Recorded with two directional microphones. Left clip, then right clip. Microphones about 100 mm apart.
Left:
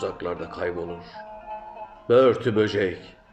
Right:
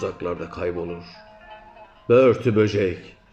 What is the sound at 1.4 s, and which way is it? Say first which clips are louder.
Music: left 7 dB; 40° left (ahead or behind).